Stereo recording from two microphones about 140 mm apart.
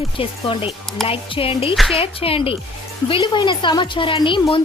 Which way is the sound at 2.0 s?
40° left (ahead or behind).